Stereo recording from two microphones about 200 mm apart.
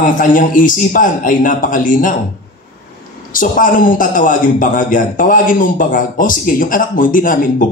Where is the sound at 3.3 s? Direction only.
40° left (ahead or behind).